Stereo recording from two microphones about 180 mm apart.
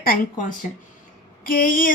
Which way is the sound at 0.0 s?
55° left (ahead or behind).